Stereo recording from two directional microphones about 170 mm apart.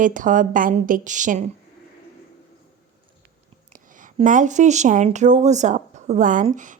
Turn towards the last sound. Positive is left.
turn(degrees=-50)  # may be behind; listen again after turning